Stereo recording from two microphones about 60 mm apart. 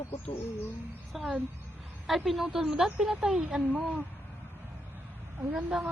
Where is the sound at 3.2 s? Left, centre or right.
Right.